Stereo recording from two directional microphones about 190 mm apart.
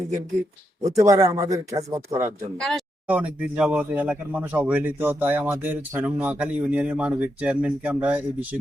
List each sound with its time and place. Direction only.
0.9 s speech: 15° right (ahead or behind)
2.6 s a sound: centre (ahead or behind)
3.2 s speech: 10° right (ahead or behind)